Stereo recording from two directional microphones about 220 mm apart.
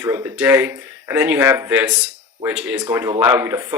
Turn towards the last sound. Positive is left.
turn(degrees=-10)  # may be behind; listen again after turning